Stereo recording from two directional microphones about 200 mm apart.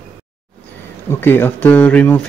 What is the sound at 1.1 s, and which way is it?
Speech, 10° left (ahead or behind).